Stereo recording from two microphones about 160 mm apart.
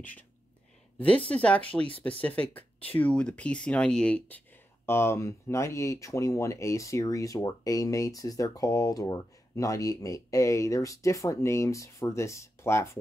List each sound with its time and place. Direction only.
0.9 s speech: 5° left (ahead or behind)